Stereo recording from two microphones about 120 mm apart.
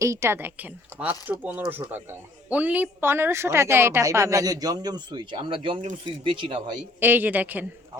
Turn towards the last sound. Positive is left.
turn(degrees=-15)  # may be behind; listen again after turning